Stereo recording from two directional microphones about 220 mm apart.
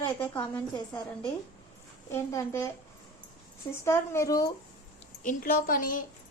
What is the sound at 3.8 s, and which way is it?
Speech, 10° left (ahead or behind).